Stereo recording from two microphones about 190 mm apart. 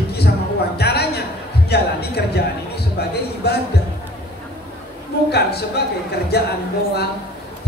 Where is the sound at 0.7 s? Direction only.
55° left (ahead or behind).